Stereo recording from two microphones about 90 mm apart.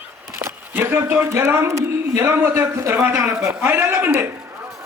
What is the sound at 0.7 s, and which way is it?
A man's voice, 25° right (ahead or behind).